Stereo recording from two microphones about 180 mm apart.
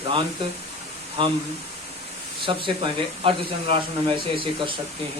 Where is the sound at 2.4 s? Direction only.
25° right (ahead or behind).